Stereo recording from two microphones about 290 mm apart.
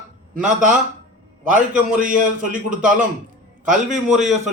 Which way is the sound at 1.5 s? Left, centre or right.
Centre.